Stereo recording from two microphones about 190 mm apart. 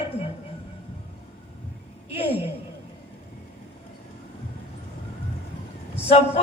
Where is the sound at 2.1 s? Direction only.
30° left (ahead or behind).